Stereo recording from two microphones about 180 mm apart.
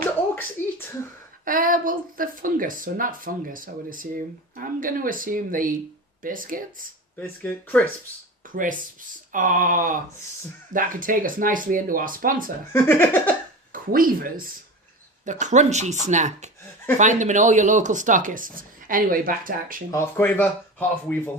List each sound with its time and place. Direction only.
0.6 s a sound: 10° left (ahead or behind)
1.5 s speech: 50° right (ahead or behind)
7.2 s speech: 10° left (ahead or behind)
8.4 s speech: 50° right (ahead or behind)
12.7 s speech: 10° left (ahead or behind)
13.7 s speech: 50° right (ahead or behind)
19.9 s speech: 15° left (ahead or behind)